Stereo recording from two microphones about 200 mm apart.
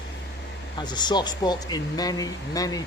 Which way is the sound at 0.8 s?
20° left (ahead or behind).